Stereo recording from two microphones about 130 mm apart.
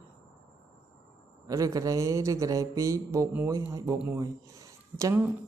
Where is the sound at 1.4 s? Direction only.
25° right (ahead or behind).